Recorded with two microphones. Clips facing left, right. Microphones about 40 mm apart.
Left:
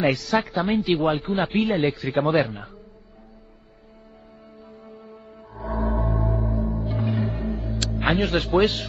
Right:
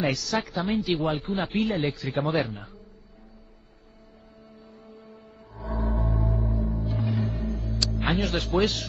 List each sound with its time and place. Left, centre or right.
0.0 s a man's voice: left
5.5 s music: left
5.8 s music: centre
6.8 s music: left
7.9 s speech: left